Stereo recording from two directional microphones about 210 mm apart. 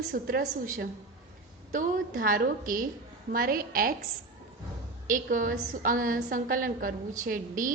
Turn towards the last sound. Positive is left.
turn(degrees=-40)  # may be behind; listen again after turning